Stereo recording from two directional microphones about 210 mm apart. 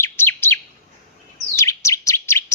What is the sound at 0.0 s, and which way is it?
Chirp, 10° left (ahead or behind).